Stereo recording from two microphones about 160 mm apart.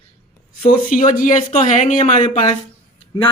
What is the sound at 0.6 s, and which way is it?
Speech, 55° left (ahead or behind).